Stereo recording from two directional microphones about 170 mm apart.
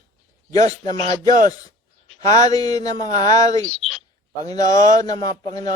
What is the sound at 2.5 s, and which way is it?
A man's voice, 20° left (ahead or behind).